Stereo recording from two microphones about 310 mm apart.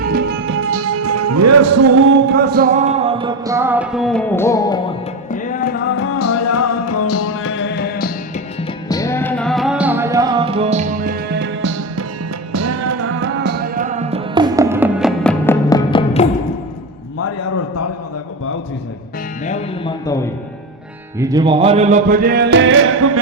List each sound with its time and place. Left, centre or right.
0.0 s music: right
2.0 s music: right; by 4.8 s centre
5.3 s music: left
6.0 s music: left
8.6 s music: centre; by 12.0 s right
12.5 s music: right; by 16.3 s centre
17.2 s a sound: left
19.5 s music: centre
21.2 s music: centre; by 23.2 s right